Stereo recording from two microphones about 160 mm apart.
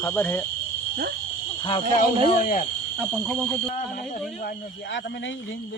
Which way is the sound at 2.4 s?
60° left (ahead or behind).